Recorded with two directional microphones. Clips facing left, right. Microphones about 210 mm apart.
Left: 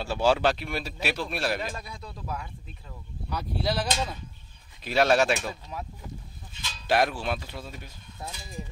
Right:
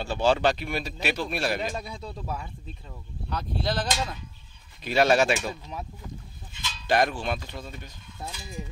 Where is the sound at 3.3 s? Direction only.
10° left (ahead or behind).